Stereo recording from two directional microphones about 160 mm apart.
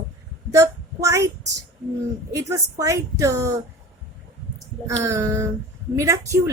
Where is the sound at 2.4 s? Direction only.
20° right (ahead or behind).